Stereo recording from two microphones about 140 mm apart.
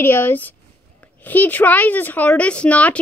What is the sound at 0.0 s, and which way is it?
A woman's voice, 15° left (ahead or behind).